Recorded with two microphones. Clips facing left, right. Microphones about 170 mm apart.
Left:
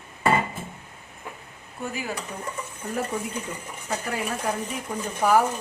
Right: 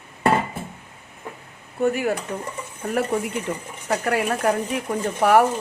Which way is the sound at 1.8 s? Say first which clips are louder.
Right 10 dB; 60° right (ahead or behind).